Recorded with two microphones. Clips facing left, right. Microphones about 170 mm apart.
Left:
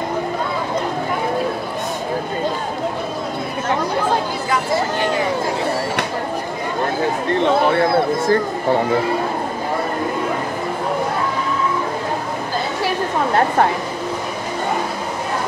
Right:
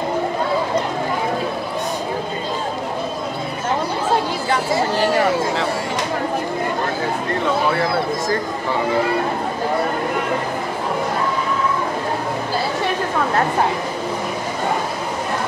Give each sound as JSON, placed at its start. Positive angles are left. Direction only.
{"t": 7.4, "sound": "speech", "side_deg": 25}